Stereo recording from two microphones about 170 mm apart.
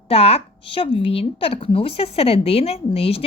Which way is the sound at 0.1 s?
35° left (ahead or behind).